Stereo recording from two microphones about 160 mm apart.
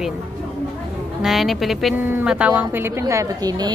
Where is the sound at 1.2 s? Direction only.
Centre (ahead or behind).